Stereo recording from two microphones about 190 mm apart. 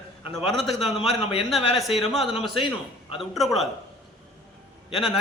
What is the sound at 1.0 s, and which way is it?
Speech, 30° left (ahead or behind).